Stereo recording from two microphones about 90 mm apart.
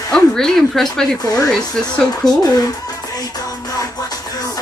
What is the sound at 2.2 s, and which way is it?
Speech, 40° left (ahead or behind).